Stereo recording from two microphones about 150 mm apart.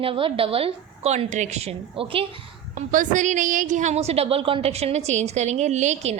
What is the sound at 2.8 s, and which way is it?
A woman's voice, 55° right (ahead or behind).